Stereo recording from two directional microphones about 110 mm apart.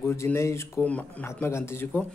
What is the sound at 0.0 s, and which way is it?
Speech, 20° left (ahead or behind).